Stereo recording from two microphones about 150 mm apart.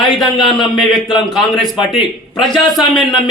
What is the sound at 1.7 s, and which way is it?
Speech, 35° left (ahead or behind).